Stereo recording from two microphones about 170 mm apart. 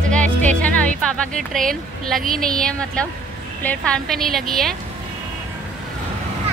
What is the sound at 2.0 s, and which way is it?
A woman's voice, centre (ahead or behind).